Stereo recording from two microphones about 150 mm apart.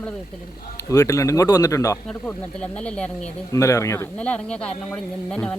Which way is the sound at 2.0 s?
5° left (ahead or behind).